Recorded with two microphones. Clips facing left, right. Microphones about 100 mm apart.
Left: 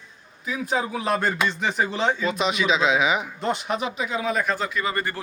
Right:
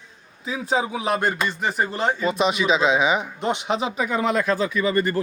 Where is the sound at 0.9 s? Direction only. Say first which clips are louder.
Right 1 dB; 10° right (ahead or behind).